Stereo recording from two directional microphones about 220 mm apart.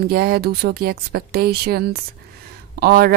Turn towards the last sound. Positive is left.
turn(degrees=-45)  # may be behind; listen again after turning